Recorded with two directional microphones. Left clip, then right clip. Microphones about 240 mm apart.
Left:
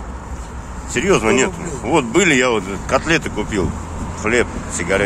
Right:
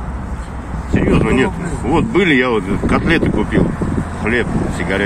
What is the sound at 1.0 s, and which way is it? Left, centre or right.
Speech, centre.